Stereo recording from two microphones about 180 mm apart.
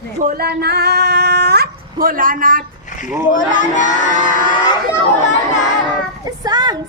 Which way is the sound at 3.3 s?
45° left (ahead or behind).